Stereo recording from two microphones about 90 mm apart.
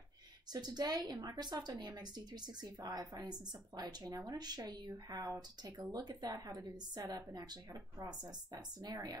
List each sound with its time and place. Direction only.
0.5 s a woman's voice: 50° right (ahead or behind)